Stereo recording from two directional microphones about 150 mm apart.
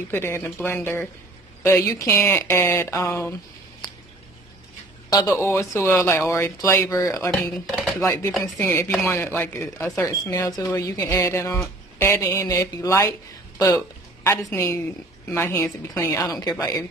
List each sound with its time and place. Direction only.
0.1 s speech: 15° left (ahead or behind)
5.4 s speech: 15° left (ahead or behind)
7.5 s chopping: 5° left (ahead or behind)
8.0 s speech: 20° left (ahead or behind)
13.6 s a sound: 20° left (ahead or behind)
14.5 s speech: 20° left (ahead or behind)